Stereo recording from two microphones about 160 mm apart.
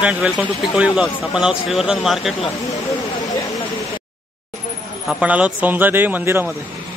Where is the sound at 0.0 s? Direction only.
10° right (ahead or behind).